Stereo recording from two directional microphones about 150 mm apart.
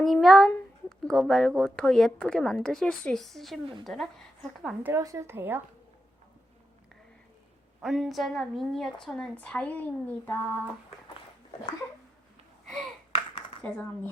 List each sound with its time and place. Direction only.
0.0 s speech: centre (ahead or behind)
4.9 s speech: 20° right (ahead or behind)
7.8 s speech: centre (ahead or behind); by 10.6 s 15° left (ahead or behind)
12.6 s a sound: centre (ahead or behind)
13.6 s speech: 5° left (ahead or behind)